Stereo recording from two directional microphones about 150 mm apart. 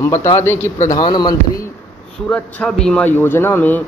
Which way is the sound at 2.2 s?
10° left (ahead or behind).